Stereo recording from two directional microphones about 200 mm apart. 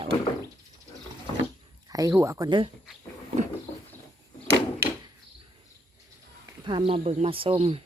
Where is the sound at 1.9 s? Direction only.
15° right (ahead or behind).